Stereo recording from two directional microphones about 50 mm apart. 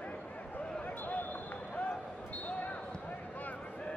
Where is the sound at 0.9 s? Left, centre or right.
Left.